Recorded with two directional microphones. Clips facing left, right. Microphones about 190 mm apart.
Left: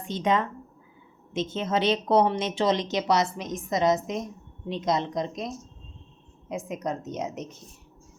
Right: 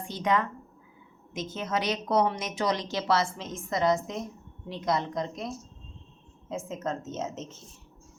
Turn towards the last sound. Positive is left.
turn(degrees=15)  # may be behind; listen again after turning